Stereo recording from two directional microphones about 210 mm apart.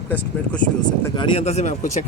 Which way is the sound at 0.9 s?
20° left (ahead or behind).